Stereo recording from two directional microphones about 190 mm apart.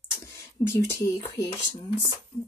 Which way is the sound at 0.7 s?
15° left (ahead or behind).